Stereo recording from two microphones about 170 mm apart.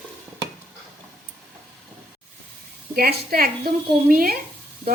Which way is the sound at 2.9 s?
60° right (ahead or behind).